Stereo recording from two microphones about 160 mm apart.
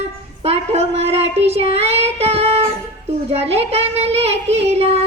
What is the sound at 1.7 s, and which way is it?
Child singing, 40° right (ahead or behind).